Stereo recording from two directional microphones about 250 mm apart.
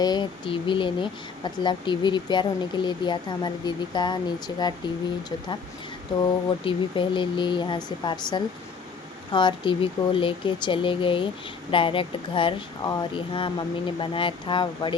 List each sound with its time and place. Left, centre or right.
0.0 s speech: centre
6.2 s speech: centre